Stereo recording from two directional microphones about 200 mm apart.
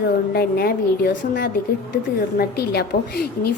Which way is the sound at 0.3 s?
50° left (ahead or behind).